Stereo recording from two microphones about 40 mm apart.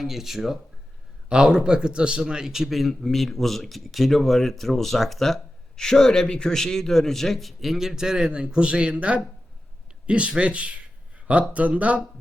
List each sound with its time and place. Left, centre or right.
0.0 s speech: centre
1.3 s a man's voice: right